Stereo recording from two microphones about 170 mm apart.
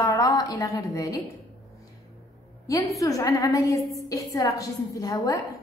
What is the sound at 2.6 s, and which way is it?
A woman's voice, 20° left (ahead or behind).